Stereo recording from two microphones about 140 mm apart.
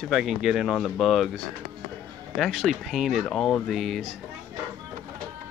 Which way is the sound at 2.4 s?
Centre (ahead or behind).